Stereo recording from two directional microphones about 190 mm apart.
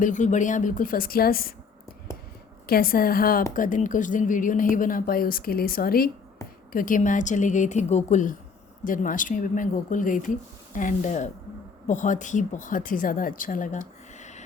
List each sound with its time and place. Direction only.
0.0 s a woman's voice: 40° left (ahead or behind)
2.6 s a woman's voice: 50° left (ahead or behind)